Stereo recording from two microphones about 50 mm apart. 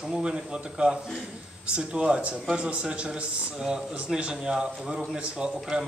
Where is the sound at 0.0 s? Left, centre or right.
Centre.